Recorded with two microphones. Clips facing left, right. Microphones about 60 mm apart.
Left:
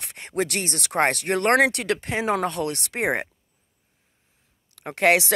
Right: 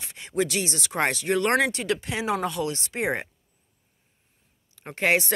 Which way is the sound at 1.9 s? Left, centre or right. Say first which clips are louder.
Left 3 dB; left.